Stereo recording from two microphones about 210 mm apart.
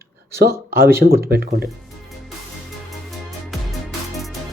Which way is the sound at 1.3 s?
45° right (ahead or behind).